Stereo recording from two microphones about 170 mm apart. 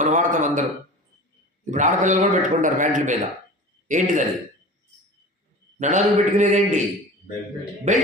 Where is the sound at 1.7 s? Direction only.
45° right (ahead or behind).